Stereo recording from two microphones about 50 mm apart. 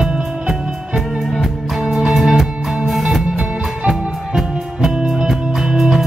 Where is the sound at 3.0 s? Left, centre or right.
Centre.